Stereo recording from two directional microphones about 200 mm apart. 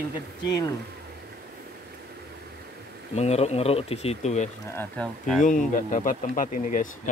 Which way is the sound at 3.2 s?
35° left (ahead or behind).